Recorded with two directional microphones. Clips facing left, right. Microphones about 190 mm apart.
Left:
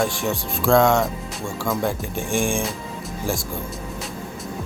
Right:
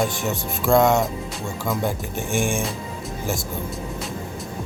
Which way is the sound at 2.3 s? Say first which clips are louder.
Left 1 dB; 5° right (ahead or behind).